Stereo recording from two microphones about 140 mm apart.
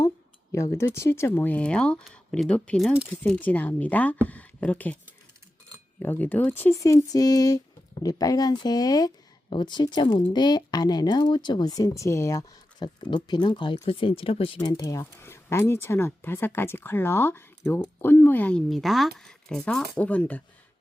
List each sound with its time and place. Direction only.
0.5 s speech: 20° left (ahead or behind)
6.0 s speech: 15° left (ahead or behind); by 14.6 s 40° left (ahead or behind)
14.6 s speech: 30° left (ahead or behind); by 18.6 s 10° left (ahead or behind)
18.7 s speech: centre (ahead or behind)